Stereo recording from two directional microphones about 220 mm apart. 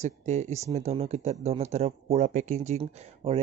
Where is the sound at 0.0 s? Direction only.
30° right (ahead or behind).